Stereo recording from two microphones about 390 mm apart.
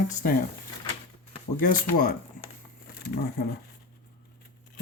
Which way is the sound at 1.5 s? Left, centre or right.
Left.